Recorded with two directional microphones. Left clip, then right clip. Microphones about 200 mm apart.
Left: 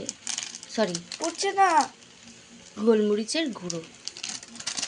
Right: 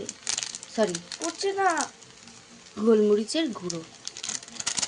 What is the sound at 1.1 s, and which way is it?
Speech, 20° left (ahead or behind).